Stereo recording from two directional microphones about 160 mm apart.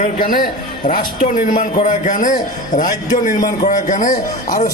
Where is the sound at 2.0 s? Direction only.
55° left (ahead or behind).